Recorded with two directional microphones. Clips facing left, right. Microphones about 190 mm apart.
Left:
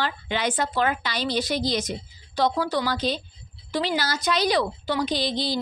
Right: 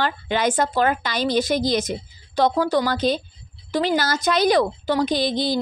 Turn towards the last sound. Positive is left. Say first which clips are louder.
# right 4 dB
turn(degrees=-50)  # may be behind; listen again after turning